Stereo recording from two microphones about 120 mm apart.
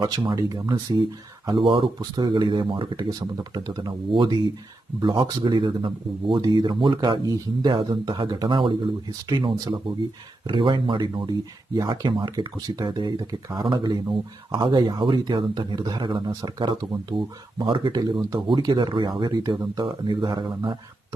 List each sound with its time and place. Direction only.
0.0 s speech: 35° right (ahead or behind)